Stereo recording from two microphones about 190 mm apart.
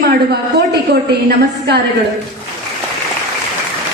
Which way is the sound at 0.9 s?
60° right (ahead or behind).